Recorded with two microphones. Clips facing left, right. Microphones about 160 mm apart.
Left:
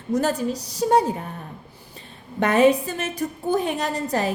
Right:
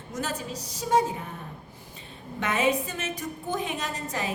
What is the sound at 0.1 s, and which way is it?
Speech, 35° left (ahead or behind).